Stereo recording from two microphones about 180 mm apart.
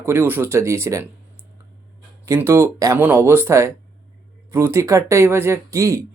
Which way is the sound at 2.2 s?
15° right (ahead or behind).